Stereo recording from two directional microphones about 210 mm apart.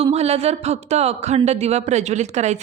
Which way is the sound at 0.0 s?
30° right (ahead or behind).